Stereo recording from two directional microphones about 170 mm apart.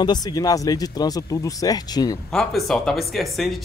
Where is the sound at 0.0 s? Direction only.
25° left (ahead or behind).